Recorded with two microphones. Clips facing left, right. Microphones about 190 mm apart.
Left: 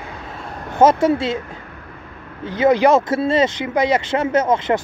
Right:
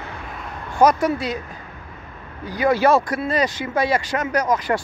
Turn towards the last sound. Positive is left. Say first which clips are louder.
# left 4 dB
turn(degrees=25)  # may be behind; listen again after turning